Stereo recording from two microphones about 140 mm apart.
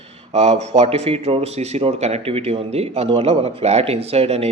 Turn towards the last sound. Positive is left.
turn(degrees=-50)  # may be behind; listen again after turning